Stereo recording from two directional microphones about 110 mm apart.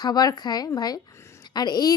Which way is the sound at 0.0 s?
35° left (ahead or behind).